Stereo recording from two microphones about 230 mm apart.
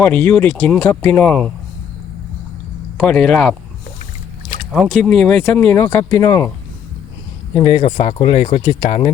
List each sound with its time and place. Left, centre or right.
0.0 s speech: centre
3.0 s speech: centre
4.7 s speech: centre
7.5 s speech: left